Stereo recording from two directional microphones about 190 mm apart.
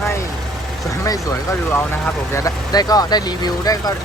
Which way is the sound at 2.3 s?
20° left (ahead or behind).